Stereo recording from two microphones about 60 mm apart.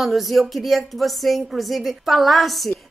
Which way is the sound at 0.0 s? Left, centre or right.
Centre.